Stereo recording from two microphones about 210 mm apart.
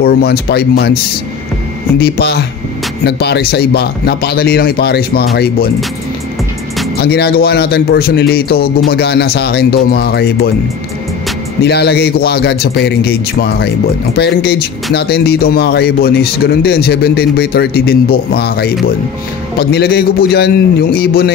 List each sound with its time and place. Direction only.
0.0 s speech: 50° left (ahead or behind)
2.0 s speech: 50° left (ahead or behind)
7.0 s speech: 50° left (ahead or behind)
11.6 s speech: 50° left (ahead or behind)